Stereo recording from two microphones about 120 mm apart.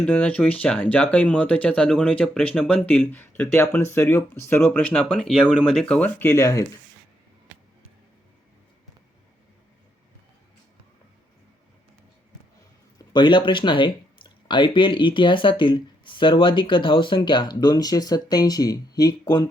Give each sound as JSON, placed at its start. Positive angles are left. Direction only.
{"t": 0.0, "sound": "speech", "side_deg": 10}
{"t": 13.1, "sound": "speech", "side_deg": 40}